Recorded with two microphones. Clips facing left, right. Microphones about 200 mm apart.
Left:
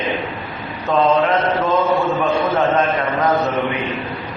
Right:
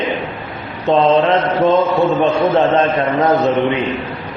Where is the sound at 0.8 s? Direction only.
25° right (ahead or behind).